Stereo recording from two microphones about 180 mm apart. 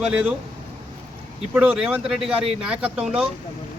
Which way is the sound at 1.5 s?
5° right (ahead or behind).